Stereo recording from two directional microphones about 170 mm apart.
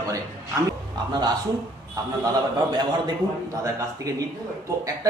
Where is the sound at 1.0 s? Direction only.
25° right (ahead or behind).